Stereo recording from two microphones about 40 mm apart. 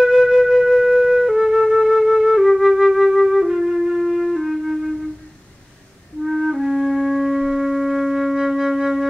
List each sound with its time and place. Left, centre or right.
0.0 s flute: centre
6.2 s music: centre